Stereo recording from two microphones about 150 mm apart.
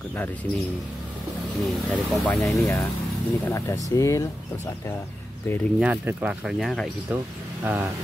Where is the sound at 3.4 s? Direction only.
20° left (ahead or behind).